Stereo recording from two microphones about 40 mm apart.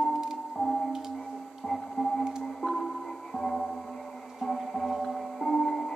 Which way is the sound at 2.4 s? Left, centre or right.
Centre.